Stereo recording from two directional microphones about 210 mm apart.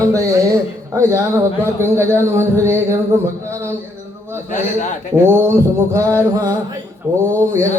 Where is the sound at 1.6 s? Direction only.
10° right (ahead or behind).